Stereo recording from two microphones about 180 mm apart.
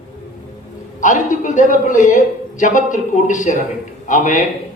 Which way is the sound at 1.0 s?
45° left (ahead or behind).